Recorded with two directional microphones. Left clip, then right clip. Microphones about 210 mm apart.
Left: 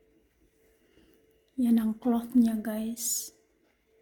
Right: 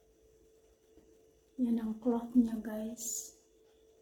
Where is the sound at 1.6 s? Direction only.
55° left (ahead or behind).